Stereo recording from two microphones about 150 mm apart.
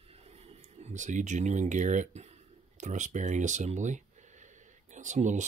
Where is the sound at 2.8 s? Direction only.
55° right (ahead or behind).